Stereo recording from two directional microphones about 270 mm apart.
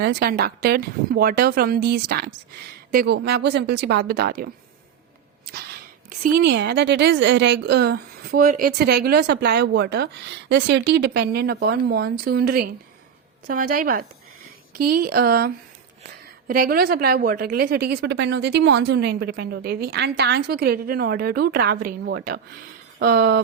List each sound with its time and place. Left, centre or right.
0.0 s a woman's voice: right
6.1 s a woman's voice: right